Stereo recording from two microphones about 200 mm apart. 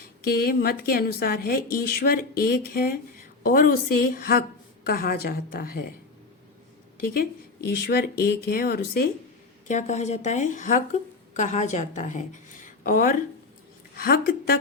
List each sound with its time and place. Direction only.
0.3 s a woman's voice: 50° left (ahead or behind)
7.8 s a woman's voice: 50° left (ahead or behind)
9.6 s a woman's voice: 35° left (ahead or behind)